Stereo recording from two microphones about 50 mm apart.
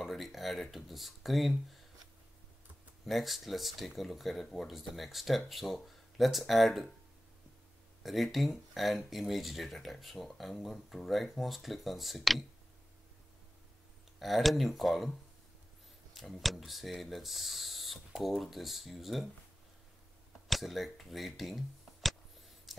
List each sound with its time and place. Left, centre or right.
0.0 s speech: centre
3.1 s speech: centre
8.0 s speech: centre
14.2 s speech: centre
16.2 s speech: centre
20.4 s speech: centre
22.7 s a sound: centre